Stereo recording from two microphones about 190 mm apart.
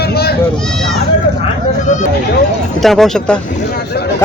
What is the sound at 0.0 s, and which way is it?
Sheep, 55° left (ahead or behind).